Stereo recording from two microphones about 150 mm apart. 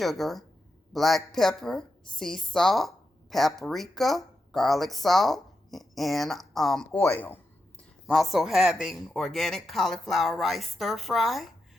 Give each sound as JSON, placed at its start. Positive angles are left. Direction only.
{"t": 0.0, "sound": "a woman's voice", "side_deg": 0}
{"t": 7.0, "sound": "speech", "side_deg": 15}
{"t": 8.0, "sound": "a woman's voice", "side_deg": 0}